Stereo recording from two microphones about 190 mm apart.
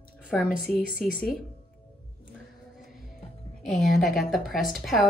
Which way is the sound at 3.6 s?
Centre (ahead or behind).